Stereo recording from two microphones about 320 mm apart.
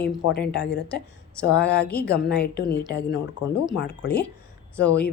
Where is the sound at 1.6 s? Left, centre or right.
Left.